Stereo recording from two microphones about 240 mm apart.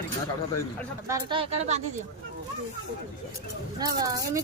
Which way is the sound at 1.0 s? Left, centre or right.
Centre.